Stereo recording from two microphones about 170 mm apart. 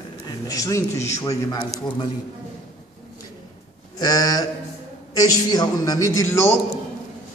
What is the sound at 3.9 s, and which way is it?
A man's voice, 20° left (ahead or behind).